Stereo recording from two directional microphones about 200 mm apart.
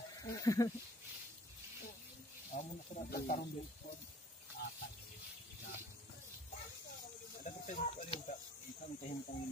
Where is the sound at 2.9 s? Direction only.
35° left (ahead or behind).